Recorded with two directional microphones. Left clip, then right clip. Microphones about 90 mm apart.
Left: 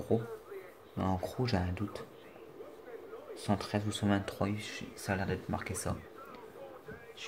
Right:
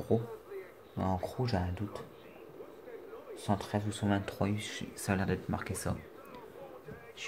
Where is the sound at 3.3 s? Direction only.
15° left (ahead or behind).